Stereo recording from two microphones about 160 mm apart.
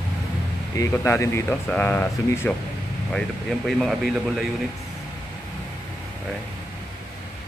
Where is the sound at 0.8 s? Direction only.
15° left (ahead or behind).